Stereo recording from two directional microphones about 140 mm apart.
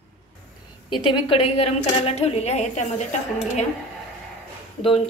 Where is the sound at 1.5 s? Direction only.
50° left (ahead or behind).